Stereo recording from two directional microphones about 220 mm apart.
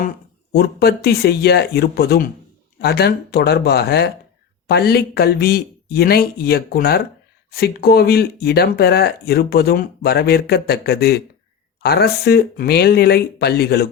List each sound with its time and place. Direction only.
0.5 s speech: 45° left (ahead or behind)